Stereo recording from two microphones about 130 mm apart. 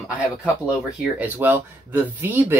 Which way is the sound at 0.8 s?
10° right (ahead or behind).